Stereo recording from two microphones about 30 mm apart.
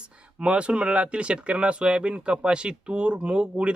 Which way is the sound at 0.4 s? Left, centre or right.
Right.